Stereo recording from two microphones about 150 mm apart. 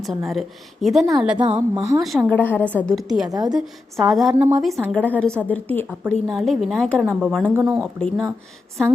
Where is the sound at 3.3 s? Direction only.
25° right (ahead or behind).